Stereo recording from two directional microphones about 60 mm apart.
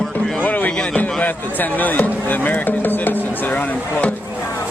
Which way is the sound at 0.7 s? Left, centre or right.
Left.